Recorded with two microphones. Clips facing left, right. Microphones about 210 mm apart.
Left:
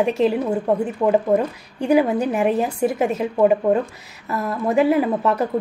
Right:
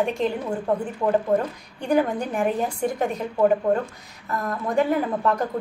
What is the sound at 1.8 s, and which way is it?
Speech, 10° left (ahead or behind).